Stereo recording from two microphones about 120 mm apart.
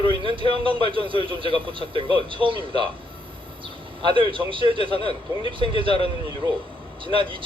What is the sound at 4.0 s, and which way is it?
A man's voice, 45° right (ahead or behind).